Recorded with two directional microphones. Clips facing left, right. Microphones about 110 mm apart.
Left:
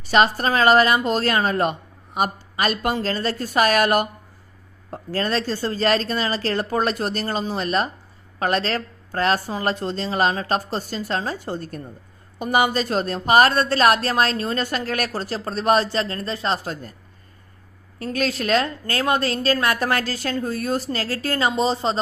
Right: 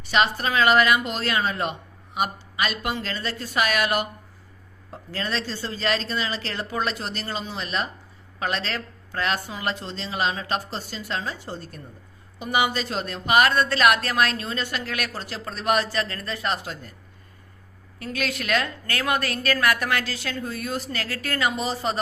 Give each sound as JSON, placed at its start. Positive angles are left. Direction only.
{"t": 0.0, "sound": "a woman's voice", "side_deg": 40}
{"t": 18.0, "sound": "a woman's voice", "side_deg": 35}